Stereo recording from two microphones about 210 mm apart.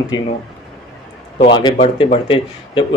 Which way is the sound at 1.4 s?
20° left (ahead or behind).